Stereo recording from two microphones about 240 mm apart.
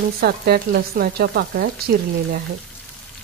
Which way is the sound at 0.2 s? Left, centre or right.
Right.